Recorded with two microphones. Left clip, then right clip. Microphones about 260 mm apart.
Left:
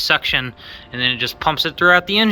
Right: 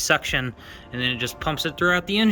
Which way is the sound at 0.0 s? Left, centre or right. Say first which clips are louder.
Left 5 dB; centre.